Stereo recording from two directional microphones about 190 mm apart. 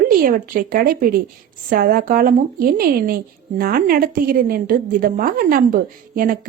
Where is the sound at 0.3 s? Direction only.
45° right (ahead or behind).